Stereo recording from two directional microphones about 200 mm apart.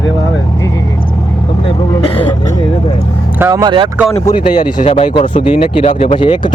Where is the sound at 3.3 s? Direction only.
15° right (ahead or behind).